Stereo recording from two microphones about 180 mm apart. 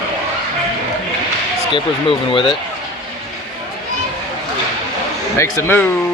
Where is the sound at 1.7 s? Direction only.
30° left (ahead or behind).